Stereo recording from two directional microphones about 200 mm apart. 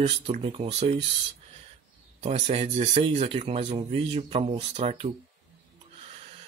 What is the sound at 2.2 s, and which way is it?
Speech, 30° right (ahead or behind).